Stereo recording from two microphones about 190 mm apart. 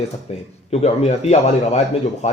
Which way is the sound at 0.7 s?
35° left (ahead or behind).